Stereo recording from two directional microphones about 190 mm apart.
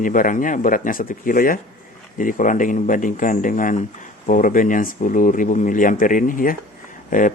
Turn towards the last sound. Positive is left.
turn(degrees=45)  # may be behind; listen again after turning